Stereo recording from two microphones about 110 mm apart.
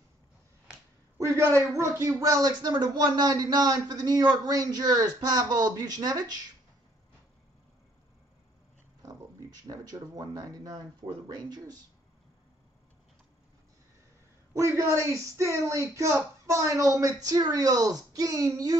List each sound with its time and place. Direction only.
1.1 s a man's voice: 25° right (ahead or behind)
9.7 s speech: 35° right (ahead or behind)
14.5 s speech: 25° right (ahead or behind)